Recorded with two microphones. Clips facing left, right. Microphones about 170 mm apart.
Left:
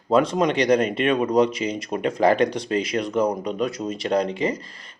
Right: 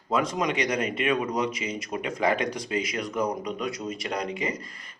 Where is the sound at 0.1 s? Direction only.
30° left (ahead or behind).